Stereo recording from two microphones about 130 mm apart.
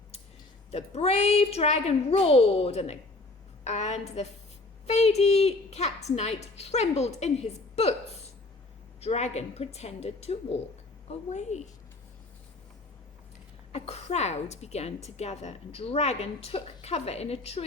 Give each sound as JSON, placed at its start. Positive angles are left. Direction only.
{"t": 0.7, "sound": "a woman's voice", "side_deg": 50}
{"t": 11.1, "sound": "a woman's voice", "side_deg": 60}
{"t": 13.7, "sound": "a woman's voice", "side_deg": 50}